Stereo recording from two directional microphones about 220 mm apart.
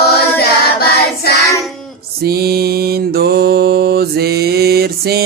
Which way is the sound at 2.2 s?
45° right (ahead or behind).